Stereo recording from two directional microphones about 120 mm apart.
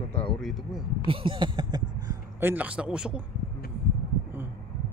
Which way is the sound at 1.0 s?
45° right (ahead or behind).